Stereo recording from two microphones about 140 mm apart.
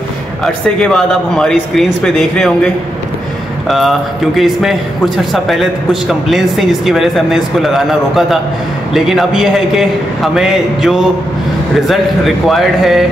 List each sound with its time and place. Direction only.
0.7 s a man's voice: 5° left (ahead or behind)